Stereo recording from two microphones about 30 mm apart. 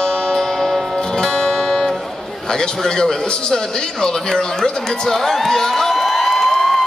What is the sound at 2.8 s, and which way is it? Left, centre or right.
Speech, centre.